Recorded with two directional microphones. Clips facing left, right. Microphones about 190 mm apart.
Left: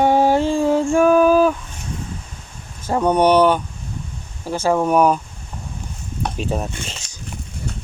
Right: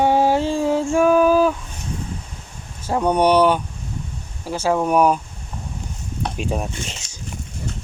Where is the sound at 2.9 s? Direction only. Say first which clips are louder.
Left 2 dB; 10° right (ahead or behind).